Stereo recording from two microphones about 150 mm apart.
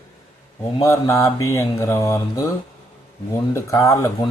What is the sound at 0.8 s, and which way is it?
Speech, 20° left (ahead or behind).